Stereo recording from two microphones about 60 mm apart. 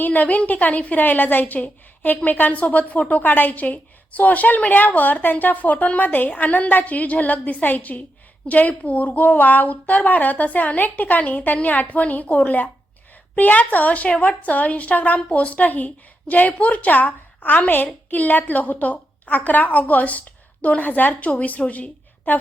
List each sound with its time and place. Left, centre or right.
0.0 s a woman's voice: left